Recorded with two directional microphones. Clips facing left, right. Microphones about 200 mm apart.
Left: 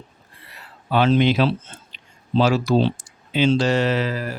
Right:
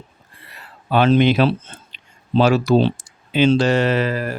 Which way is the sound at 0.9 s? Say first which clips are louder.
Right 3 dB; 55° right (ahead or behind).